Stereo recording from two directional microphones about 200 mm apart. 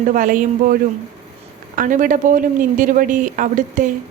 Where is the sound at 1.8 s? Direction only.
40° right (ahead or behind).